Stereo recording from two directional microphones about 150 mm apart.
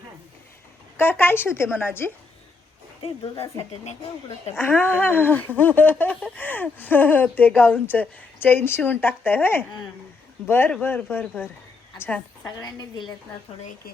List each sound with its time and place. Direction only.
0.9 s speech: 15° left (ahead or behind)
3.0 s a woman's voice: 40° left (ahead or behind)
4.5 s a woman's voice: 15° left (ahead or behind)